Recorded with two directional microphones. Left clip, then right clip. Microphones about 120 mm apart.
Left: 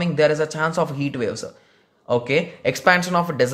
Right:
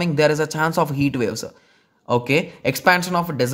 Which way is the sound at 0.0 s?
55° right (ahead or behind).